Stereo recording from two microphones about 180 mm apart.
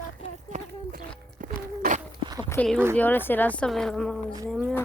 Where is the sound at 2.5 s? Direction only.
5° left (ahead or behind).